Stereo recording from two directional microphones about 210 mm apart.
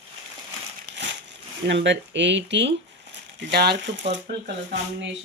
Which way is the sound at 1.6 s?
55° right (ahead or behind).